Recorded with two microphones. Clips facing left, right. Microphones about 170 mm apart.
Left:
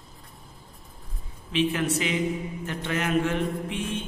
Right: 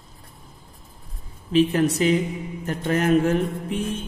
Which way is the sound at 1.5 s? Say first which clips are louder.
Right 6 dB; 40° right (ahead or behind).